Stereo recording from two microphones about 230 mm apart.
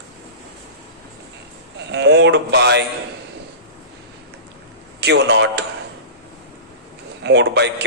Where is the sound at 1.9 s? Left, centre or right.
Right.